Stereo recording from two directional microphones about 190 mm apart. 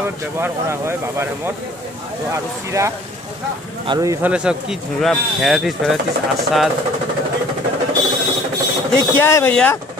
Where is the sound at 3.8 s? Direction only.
20° right (ahead or behind).